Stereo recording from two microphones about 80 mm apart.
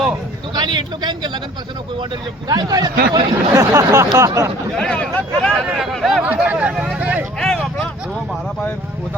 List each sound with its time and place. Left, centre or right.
0.5 s a man's voice: right
2.5 s speech: right
4.8 s speech: centre
5.8 s speech: centre
6.2 s speech: right
7.3 s a sound: centre